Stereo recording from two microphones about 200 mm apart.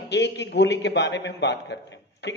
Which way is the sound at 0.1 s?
60° left (ahead or behind).